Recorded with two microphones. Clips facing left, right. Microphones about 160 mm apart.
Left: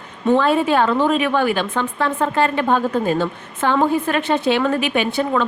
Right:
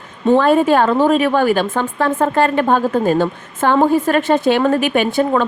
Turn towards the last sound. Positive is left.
turn(degrees=-45)  # may be behind; listen again after turning